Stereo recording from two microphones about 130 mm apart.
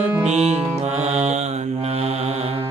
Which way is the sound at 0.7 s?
60° right (ahead or behind).